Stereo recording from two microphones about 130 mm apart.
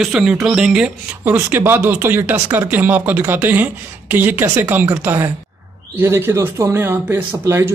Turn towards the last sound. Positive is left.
turn(degrees=-20)  # may be behind; listen again after turning